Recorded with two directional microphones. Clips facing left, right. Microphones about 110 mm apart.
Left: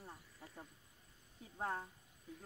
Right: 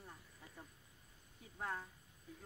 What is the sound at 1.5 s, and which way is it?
Speech, 30° left (ahead or behind).